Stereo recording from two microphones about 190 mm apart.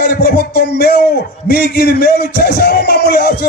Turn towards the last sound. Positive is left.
turn(degrees=60)  # may be behind; listen again after turning